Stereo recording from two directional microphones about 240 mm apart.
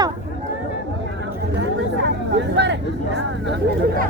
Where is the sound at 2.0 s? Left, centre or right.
Right.